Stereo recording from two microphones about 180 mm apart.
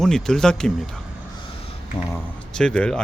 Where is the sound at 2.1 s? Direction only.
5° left (ahead or behind).